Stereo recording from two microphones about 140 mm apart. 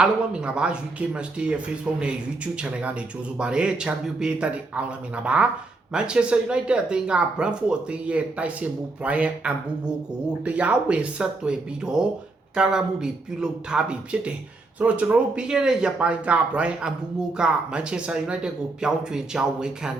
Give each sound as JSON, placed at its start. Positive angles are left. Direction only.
{"t": 0.0, "sound": "speech", "side_deg": -5}